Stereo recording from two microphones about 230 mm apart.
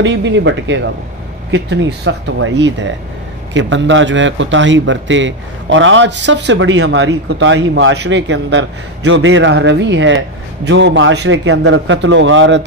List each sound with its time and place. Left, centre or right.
0.0 s a man's voice: right